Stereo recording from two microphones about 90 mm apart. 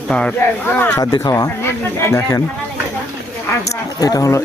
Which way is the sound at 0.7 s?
25° left (ahead or behind).